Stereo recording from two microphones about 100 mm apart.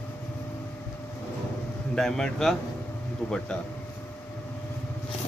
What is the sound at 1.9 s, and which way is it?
Speech, 5° left (ahead or behind).